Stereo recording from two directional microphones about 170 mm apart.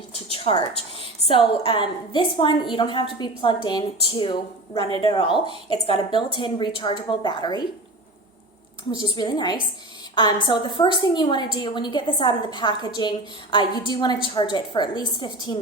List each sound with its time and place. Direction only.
0.3 s a sound: 35° left (ahead or behind)
1.3 s a woman's voice: 30° left (ahead or behind)
9.1 s a woman's voice: 25° left (ahead or behind)